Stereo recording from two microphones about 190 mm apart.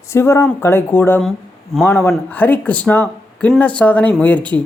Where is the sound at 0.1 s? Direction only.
15° left (ahead or behind).